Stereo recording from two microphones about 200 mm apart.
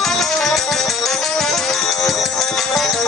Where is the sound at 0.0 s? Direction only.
Centre (ahead or behind).